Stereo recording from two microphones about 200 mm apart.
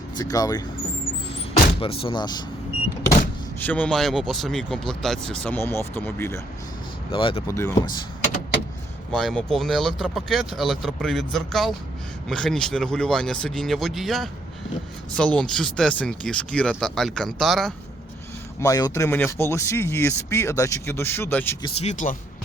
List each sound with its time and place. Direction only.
0.2 s speech: 20° left (ahead or behind)
1.8 s speech: 25° left (ahead or behind)
3.6 s speech: 10° left (ahead or behind)
7.1 s speech: 25° left (ahead or behind)
7.4 s speech: 15° left (ahead or behind)
9.1 s speech: centre (ahead or behind)
18.6 s speech: 15° left (ahead or behind)
21.6 s speech: 35° left (ahead or behind)